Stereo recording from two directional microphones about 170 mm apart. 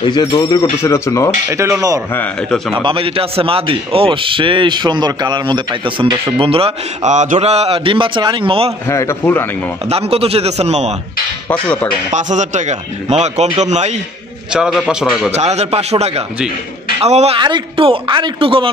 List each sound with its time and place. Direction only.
0.0 s speech: 25° left (ahead or behind)
1.5 s speech: 15° right (ahead or behind)
2.1 s a man's voice: 5° left (ahead or behind)
2.8 s a man's voice: 30° right (ahead or behind)
8.8 s a man's voice: 15° left (ahead or behind)
9.8 s a man's voice: 35° right (ahead or behind)
11.4 s a man's voice: 10° left (ahead or behind)
12.1 s speech: 45° right (ahead or behind)
14.5 s a man's voice: 5° right (ahead or behind)
15.3 s a man's voice: 40° right (ahead or behind)
17.4 s a man's voice: 25° right (ahead or behind)